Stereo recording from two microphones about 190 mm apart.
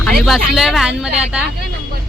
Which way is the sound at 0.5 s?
Centre (ahead or behind).